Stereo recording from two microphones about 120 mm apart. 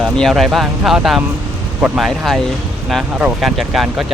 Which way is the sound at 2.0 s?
Centre (ahead or behind).